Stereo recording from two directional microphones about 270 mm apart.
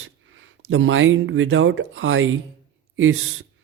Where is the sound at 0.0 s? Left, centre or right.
Right.